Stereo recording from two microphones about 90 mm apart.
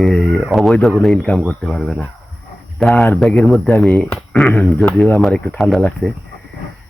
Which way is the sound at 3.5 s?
Centre (ahead or behind).